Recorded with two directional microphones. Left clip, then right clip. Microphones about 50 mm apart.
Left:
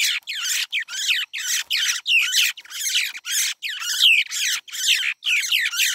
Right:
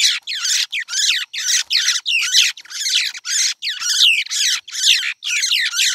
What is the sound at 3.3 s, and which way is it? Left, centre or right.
Squawk, left.